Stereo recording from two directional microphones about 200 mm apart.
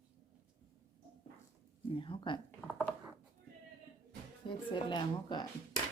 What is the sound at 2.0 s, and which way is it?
Speech, 25° left (ahead or behind).